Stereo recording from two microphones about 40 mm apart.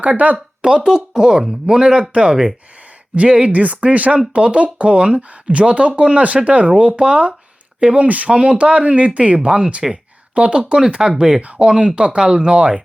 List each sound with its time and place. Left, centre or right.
0.0 s speech: right
0.6 s speech: centre
2.3 s speech: centre
3.2 s speech: right
11.3 s speech: right
11.6 s speech: right